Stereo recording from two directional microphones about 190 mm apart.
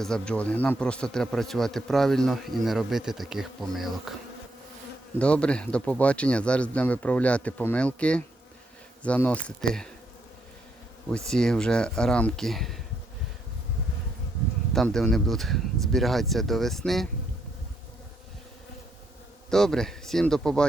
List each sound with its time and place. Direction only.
0.0 s speech: 5° left (ahead or behind)
5.2 s speech: 5° left (ahead or behind)
11.3 s speech: 5° left (ahead or behind)
14.7 s speech: centre (ahead or behind)
19.5 s speech: 5° left (ahead or behind)